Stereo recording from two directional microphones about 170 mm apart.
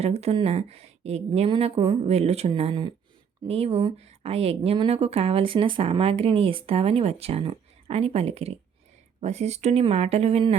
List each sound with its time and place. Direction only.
0.0 s speech: 40° right (ahead or behind)